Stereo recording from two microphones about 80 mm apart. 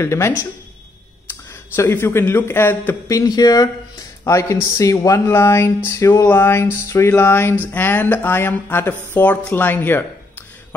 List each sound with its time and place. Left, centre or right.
0.0 s a sound: left
1.8 s speech: left
3.1 s speech: left
4.2 s speech: left
5.2 s a sound: left
7.7 s speech: left